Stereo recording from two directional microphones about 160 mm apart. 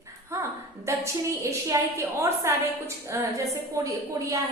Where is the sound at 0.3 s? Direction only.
20° right (ahead or behind).